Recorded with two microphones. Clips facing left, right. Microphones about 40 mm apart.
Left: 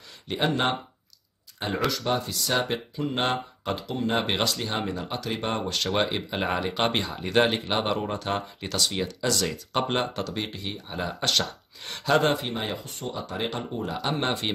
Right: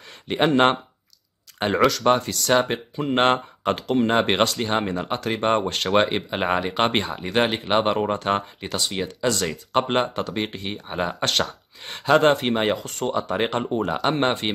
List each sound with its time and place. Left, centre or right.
0.3 s speech: right
1.6 s speech: right
2.6 s speech: right
4.1 s speech: right
7.2 s speech: right
7.7 s speech: right
12.2 s speech: right